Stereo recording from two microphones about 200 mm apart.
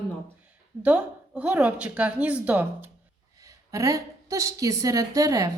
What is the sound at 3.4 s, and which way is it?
A woman's voice, 15° right (ahead or behind).